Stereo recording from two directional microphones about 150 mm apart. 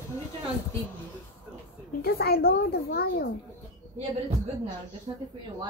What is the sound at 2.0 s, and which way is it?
A woman's voice, 90° left.